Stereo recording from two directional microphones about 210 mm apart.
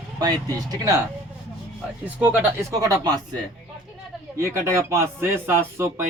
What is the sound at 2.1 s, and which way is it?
Speech, 5° right (ahead or behind).